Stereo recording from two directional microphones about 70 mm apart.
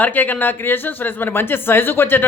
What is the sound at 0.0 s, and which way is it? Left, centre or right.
A man's voice, left.